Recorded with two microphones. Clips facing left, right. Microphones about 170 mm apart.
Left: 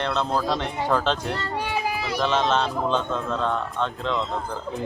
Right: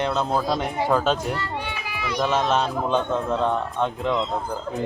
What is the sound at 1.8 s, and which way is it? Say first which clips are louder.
Run: left 3 dB; 40° left (ahead or behind).